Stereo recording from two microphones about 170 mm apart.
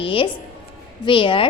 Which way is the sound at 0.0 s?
30° left (ahead or behind).